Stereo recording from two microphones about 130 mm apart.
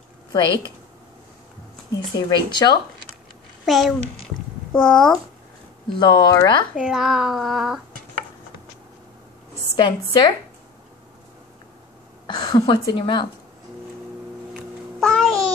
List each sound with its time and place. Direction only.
1.9 s speech: 25° left (ahead or behind)
3.6 s a child's voice: centre (ahead or behind)
5.9 s a woman's voice: 30° left (ahead or behind)
6.7 s speech: 5° right (ahead or behind)
9.8 s a woman's voice: 35° left (ahead or behind)
12.3 s a woman's voice: 35° left (ahead or behind)
15.0 s a sound: 5° left (ahead or behind)